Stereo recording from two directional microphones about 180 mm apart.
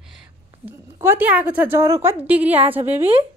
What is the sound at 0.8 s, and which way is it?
A woman's voice, 15° right (ahead or behind).